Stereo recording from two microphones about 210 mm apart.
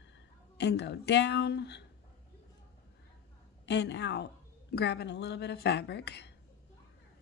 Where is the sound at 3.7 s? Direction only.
55° left (ahead or behind).